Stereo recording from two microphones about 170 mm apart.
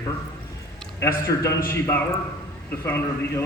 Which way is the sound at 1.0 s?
20° left (ahead or behind).